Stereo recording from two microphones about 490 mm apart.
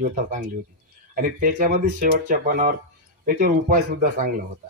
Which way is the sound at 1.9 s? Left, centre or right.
Centre.